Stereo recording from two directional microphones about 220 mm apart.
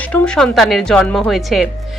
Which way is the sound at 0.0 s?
5° left (ahead or behind).